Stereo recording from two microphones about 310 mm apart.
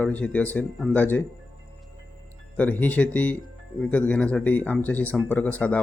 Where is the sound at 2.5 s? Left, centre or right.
Centre.